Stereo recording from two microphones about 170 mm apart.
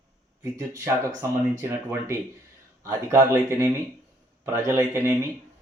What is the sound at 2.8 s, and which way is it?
Speech, 15° right (ahead or behind).